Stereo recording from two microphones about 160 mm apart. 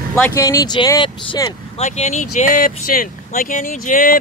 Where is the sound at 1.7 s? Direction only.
45° left (ahead or behind).